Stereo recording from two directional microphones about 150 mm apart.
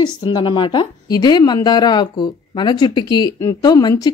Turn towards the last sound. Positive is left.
turn(degrees=25)  # may be behind; listen again after turning